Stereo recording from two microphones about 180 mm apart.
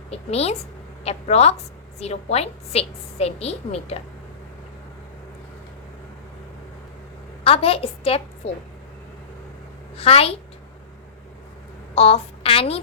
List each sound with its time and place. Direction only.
0.1 s a woman's voice: 35° left (ahead or behind)
7.4 s a woman's voice: 30° left (ahead or behind)
10.0 s a woman's voice: 35° left (ahead or behind)
11.9 s a woman's voice: 35° left (ahead or behind)